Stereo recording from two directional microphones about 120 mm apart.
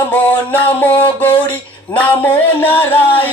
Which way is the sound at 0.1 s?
15° left (ahead or behind).